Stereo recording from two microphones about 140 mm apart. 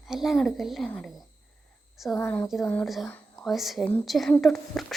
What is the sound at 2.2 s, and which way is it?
Speech, 15° left (ahead or behind).